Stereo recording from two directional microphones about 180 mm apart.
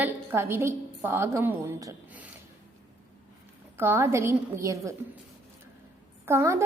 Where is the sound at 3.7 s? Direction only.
15° right (ahead or behind).